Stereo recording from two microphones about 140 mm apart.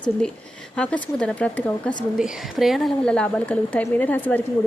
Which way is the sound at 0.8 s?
10° left (ahead or behind).